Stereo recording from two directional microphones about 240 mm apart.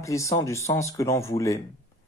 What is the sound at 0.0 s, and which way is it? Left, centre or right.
A man's voice, centre.